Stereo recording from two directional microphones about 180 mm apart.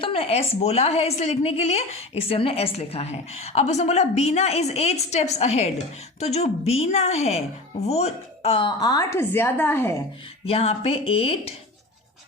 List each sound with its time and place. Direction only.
0.0 s a woman's voice: 30° left (ahead or behind); by 9.9 s 10° left (ahead or behind)
10.4 s a woman's voice: 35° left (ahead or behind)